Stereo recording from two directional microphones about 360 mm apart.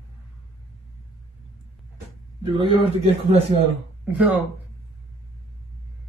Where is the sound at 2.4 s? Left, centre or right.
Centre.